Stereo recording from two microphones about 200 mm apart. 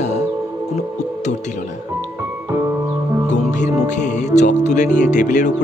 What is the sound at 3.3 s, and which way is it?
Music, 35° left (ahead or behind).